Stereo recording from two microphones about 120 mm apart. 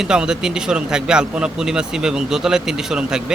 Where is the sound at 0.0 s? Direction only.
5° right (ahead or behind).